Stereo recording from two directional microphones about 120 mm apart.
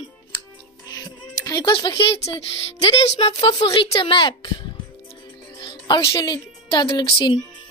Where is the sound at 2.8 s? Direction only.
55° left (ahead or behind).